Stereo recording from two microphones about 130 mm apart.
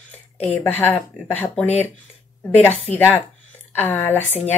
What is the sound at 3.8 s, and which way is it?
Speech, 15° left (ahead or behind).